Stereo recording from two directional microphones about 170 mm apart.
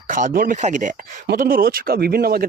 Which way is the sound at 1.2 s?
55° right (ahead or behind).